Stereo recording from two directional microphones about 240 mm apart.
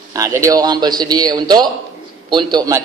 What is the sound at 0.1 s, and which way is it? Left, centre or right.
A man's voice, centre.